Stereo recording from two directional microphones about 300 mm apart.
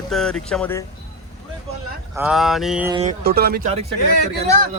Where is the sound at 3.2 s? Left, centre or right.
Right.